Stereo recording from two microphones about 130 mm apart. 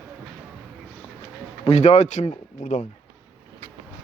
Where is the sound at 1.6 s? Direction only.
55° left (ahead or behind); by 2.9 s 75° left (ahead or behind).